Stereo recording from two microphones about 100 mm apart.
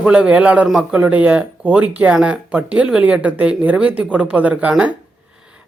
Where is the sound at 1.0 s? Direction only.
15° right (ahead or behind).